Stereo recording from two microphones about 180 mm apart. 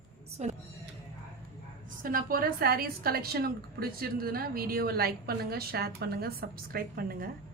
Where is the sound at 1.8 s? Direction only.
50° right (ahead or behind).